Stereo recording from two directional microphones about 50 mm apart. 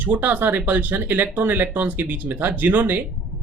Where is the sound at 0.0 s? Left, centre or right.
Right.